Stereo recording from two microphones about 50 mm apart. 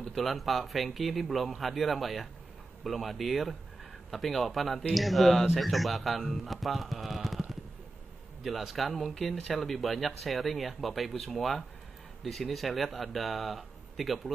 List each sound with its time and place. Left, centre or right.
0.1 s a man's voice: centre
8.5 s speech: centre